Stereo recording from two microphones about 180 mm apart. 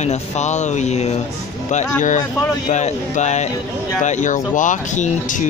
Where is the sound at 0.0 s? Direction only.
40° left (ahead or behind).